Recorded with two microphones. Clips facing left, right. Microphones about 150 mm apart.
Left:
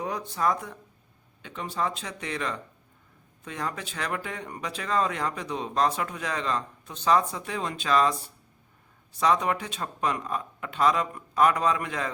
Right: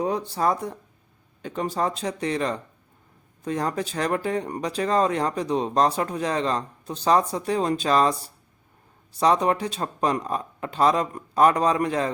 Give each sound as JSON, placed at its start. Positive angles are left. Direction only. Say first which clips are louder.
{"t": 0.0, "sound": "speech", "louder": "right 4 dB", "side_deg": -30}